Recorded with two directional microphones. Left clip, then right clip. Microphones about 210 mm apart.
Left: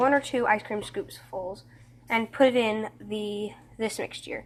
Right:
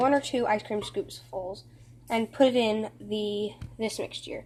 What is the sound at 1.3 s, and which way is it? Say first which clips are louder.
Speech: left 1 dB; 5° left (ahead or behind).